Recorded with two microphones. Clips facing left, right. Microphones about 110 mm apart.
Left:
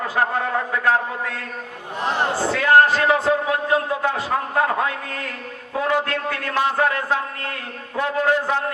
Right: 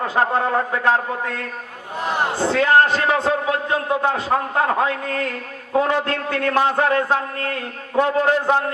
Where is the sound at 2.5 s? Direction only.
25° right (ahead or behind).